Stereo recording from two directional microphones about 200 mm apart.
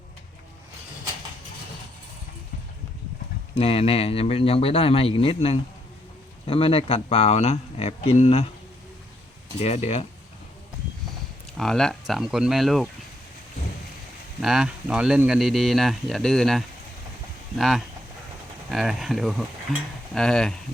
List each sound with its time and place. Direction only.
3.6 s speech: 30° left (ahead or behind)
9.6 s speech: 30° left (ahead or behind)
11.5 s speech: centre (ahead or behind)
14.4 s speech: centre (ahead or behind)